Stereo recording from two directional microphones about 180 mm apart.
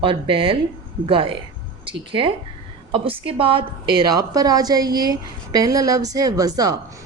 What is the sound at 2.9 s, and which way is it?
Speech, 30° right (ahead or behind).